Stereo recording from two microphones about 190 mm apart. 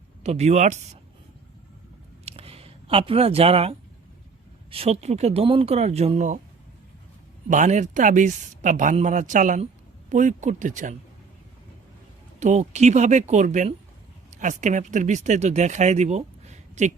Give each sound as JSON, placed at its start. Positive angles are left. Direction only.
{"t": 0.2, "sound": "speech", "side_deg": -35}
{"t": 2.2, "sound": "a sound", "side_deg": -30}
{"t": 4.7, "sound": "speech", "side_deg": -30}
{"t": 7.4, "sound": "speech", "side_deg": -40}
{"t": 12.4, "sound": "speech", "side_deg": -35}